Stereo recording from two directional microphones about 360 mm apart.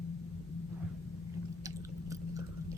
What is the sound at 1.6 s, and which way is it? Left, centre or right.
Chewing, centre.